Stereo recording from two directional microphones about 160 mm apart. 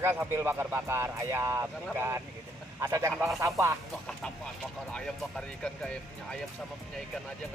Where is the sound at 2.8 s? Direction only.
20° right (ahead or behind).